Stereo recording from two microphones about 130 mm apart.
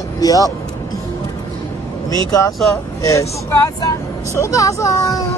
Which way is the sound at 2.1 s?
25° left (ahead or behind).